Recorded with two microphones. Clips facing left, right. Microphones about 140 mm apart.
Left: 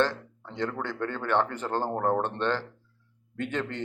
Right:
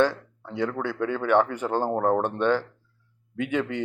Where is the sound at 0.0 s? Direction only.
10° right (ahead or behind).